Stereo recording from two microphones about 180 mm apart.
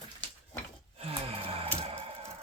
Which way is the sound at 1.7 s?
35° right (ahead or behind).